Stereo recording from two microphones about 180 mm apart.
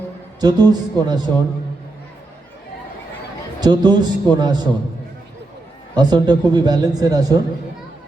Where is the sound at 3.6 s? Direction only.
25° right (ahead or behind).